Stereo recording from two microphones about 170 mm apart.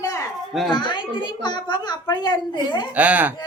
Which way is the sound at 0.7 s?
25° left (ahead or behind).